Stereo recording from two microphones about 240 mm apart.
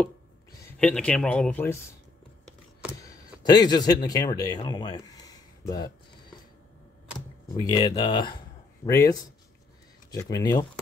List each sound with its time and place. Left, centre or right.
0.7 s speech: centre
3.0 s speech: centre
7.4 s speech: centre